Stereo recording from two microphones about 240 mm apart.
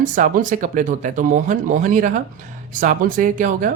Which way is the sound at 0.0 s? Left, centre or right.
Right.